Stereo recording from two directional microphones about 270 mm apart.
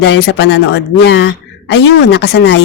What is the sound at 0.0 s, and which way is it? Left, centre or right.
A woman's voice, left.